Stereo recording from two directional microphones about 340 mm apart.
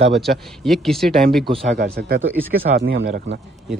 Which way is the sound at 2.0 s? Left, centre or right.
Right.